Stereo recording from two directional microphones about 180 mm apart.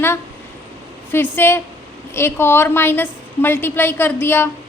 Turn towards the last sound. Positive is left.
turn(degrees=10)  # may be behind; listen again after turning